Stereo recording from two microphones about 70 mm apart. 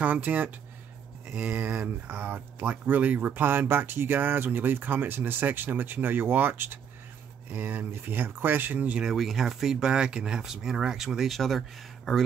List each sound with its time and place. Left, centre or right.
0.0 s speech: right
8.9 s speech: centre